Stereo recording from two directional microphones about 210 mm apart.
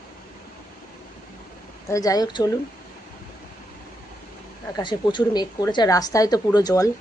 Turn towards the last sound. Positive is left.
turn(degrees=15)  # may be behind; listen again after turning